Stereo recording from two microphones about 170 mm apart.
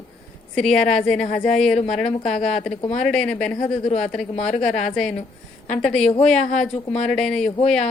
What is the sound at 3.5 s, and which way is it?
Speech, 40° left (ahead or behind).